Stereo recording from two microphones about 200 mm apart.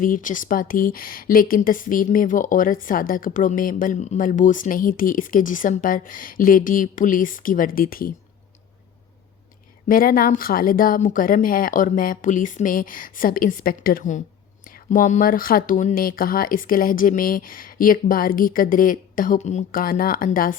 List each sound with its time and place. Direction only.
0.0 s a woman's voice: 40° left (ahead or behind)
9.9 s a woman's voice: 45° left (ahead or behind)